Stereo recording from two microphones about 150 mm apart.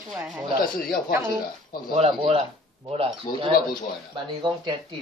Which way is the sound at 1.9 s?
40° right (ahead or behind).